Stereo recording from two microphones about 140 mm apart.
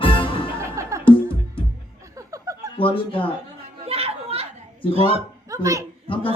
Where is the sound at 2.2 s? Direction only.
25° right (ahead or behind).